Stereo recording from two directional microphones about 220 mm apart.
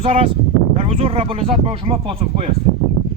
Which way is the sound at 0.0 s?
25° right (ahead or behind).